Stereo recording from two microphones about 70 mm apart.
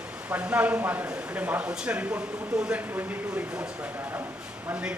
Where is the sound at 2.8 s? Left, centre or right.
Right.